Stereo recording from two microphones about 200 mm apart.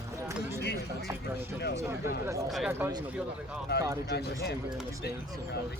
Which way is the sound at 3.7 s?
55° left (ahead or behind).